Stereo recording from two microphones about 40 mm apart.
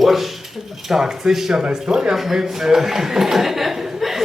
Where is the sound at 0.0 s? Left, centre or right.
Centre.